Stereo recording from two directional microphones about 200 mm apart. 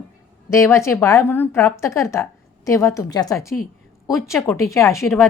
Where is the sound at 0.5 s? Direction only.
15° left (ahead or behind).